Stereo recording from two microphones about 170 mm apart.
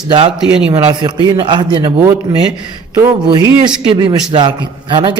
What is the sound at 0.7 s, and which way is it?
A man's voice, 30° right (ahead or behind).